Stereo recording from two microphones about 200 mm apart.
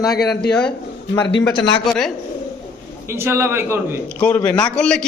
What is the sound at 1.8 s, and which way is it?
Speech, centre (ahead or behind).